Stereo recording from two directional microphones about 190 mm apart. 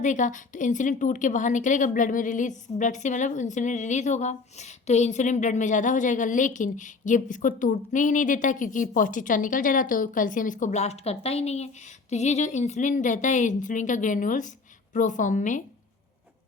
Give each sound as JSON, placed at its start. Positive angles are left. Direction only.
{"t": 0.0, "sound": "a woman's voice", "side_deg": 40}